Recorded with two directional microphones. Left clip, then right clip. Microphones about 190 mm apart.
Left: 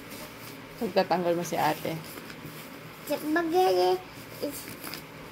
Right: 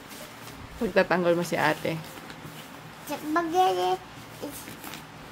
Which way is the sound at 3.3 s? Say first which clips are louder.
Right 1 dB; 10° right (ahead or behind).